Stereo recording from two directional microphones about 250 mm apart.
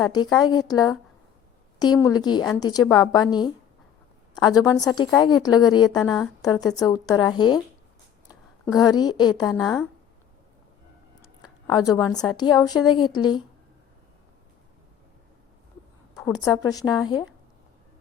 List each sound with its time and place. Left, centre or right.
0.0 s a woman's voice: centre
1.8 s a woman's voice: centre
11.4 s a woman's voice: centre
16.1 s a woman's voice: centre